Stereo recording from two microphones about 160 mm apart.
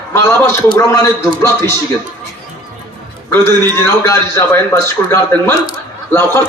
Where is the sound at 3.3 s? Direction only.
15° left (ahead or behind).